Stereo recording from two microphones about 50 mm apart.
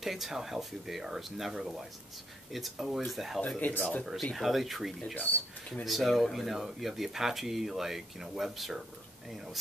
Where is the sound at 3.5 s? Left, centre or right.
Left.